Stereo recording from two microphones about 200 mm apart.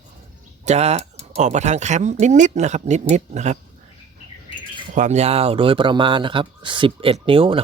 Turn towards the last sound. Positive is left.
turn(degrees=-25)  # may be behind; listen again after turning